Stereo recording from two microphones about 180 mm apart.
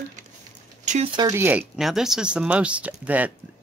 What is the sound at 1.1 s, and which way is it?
Speech, 15° right (ahead or behind).